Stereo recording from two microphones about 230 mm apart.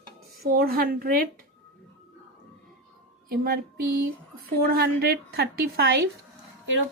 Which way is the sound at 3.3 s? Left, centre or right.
Right.